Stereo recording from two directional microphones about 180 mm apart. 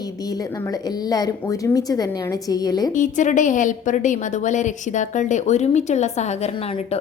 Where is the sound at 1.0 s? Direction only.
20° left (ahead or behind).